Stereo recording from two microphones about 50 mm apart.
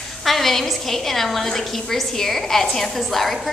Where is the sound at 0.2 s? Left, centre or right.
Centre.